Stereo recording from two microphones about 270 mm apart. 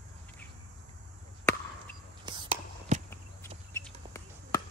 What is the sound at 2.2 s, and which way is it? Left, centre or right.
Whispering, centre.